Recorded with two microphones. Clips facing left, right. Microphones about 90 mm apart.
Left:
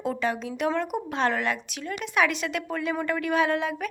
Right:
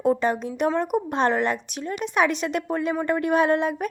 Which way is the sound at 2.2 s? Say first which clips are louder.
Right 3 dB; 40° right (ahead or behind).